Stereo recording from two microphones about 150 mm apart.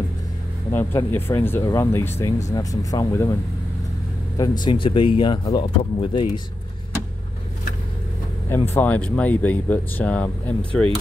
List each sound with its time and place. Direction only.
0.7 s speech: 15° left (ahead or behind)
4.4 s speech: 30° left (ahead or behind)
8.5 s speech: 15° left (ahead or behind)